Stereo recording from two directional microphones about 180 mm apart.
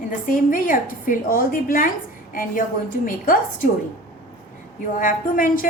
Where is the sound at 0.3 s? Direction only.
50° left (ahead or behind).